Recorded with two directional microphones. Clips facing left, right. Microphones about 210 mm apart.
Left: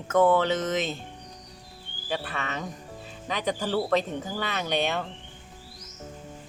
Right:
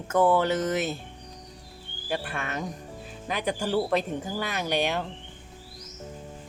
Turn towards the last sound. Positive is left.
turn(degrees=-10)  # may be behind; listen again after turning